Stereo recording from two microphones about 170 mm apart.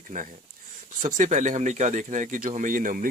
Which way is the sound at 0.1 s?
50° right (ahead or behind).